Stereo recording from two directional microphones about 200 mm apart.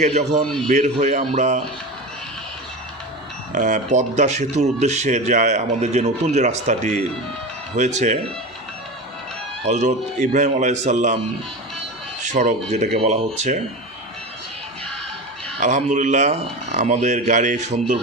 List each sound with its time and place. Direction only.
0.0 s speech: 35° right (ahead or behind)
3.5 s speech: 40° right (ahead or behind)
9.6 s speech: 35° right (ahead or behind)
12.3 s speech: 35° right (ahead or behind)
15.5 s speech: 35° right (ahead or behind)